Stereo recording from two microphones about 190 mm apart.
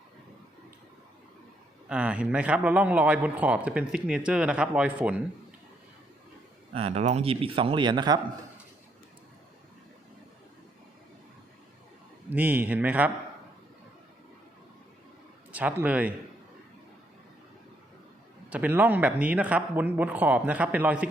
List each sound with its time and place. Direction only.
1.9 s speech: 5° right (ahead or behind)
6.7 s speech: 30° right (ahead or behind)
12.3 s speech: 10° right (ahead or behind)
15.5 s speech: 10° right (ahead or behind)
18.5 s speech: 10° right (ahead or behind)